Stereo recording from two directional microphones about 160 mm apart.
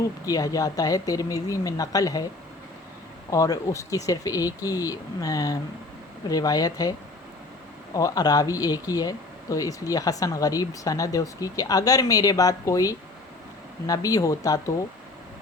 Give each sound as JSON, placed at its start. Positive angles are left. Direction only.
{"t": 0.0, "sound": "speech", "side_deg": 20}
{"t": 3.2, "sound": "speech", "side_deg": 20}
{"t": 7.9, "sound": "speech", "side_deg": 25}